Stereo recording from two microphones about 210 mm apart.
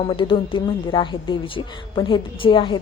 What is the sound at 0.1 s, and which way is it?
Speech, 25° left (ahead or behind).